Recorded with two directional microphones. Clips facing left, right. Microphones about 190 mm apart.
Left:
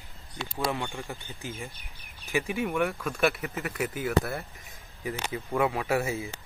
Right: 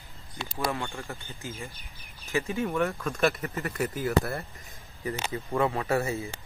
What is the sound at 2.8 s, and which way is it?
Speech, centre (ahead or behind).